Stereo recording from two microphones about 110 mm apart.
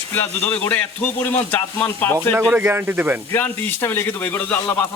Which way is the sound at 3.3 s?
25° left (ahead or behind).